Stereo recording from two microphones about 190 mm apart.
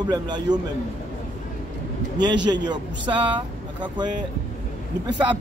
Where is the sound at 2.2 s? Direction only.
25° right (ahead or behind).